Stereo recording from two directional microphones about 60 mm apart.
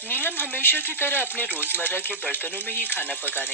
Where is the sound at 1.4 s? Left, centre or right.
Right.